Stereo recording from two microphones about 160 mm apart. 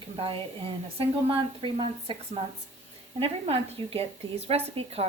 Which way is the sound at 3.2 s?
40° right (ahead or behind).